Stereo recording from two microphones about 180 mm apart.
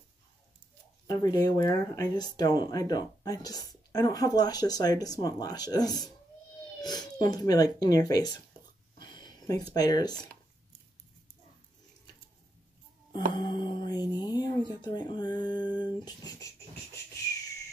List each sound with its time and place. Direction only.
1.0 s speech: 20° left (ahead or behind)
8.9 s a sound: 25° left (ahead or behind)
9.8 s speech: 20° left (ahead or behind)
13.1 s music: 25° left (ahead or behind)